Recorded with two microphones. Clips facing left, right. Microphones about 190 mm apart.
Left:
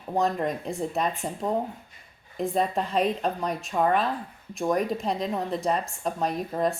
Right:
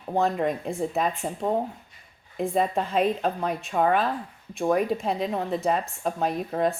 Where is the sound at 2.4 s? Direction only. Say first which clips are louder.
Right 1 dB; centre (ahead or behind).